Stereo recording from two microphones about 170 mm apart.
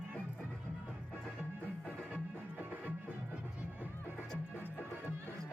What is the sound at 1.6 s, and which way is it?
Music, 10° right (ahead or behind).